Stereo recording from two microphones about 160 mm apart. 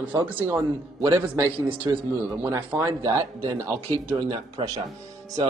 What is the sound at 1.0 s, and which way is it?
Speech, 20° right (ahead or behind).